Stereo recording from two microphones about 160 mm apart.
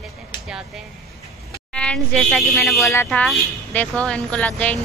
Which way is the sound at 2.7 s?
20° left (ahead or behind).